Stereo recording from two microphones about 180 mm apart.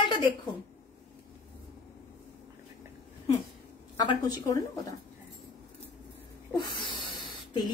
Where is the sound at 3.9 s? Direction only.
25° left (ahead or behind).